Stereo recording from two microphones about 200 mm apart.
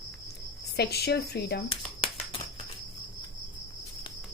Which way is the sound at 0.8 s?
55° left (ahead or behind).